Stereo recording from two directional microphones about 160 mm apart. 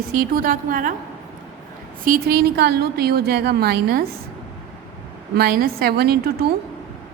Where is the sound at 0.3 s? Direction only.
60° right (ahead or behind).